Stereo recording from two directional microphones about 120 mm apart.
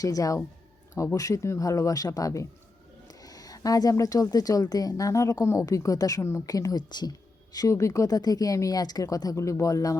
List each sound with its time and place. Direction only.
0.0 s speech: 30° left (ahead or behind)